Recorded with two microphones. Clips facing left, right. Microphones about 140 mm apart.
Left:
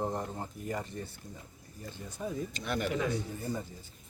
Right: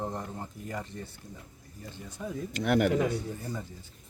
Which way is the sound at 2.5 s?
70° right (ahead or behind).